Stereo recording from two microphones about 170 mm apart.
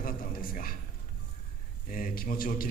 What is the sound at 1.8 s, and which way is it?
Speech, 55° left (ahead or behind).